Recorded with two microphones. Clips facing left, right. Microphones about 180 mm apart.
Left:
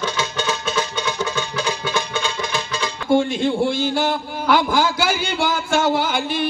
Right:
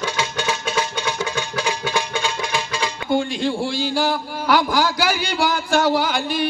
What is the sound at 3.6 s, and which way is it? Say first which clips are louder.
Speech: left 3 dB; 50° left (ahead or behind).